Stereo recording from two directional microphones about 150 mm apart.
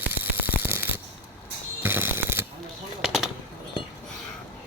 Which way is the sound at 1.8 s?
15° right (ahead or behind).